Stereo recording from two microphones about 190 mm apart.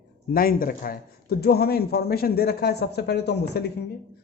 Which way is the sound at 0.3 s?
50° left (ahead or behind).